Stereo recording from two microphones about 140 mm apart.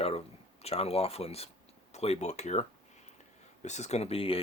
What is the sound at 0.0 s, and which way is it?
Speech, 45° left (ahead or behind).